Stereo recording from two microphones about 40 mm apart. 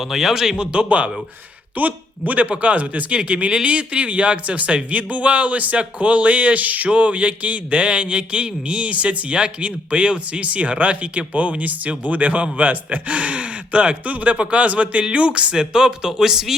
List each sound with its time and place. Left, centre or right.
0.0 s a man's voice: centre
0.5 s speech: right
1.7 s speech: right; by 16.6 s centre